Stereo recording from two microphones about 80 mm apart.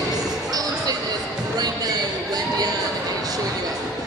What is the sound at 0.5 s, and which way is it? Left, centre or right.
Music, right.